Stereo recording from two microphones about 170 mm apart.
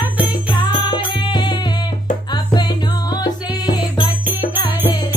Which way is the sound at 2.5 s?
25° left (ahead or behind).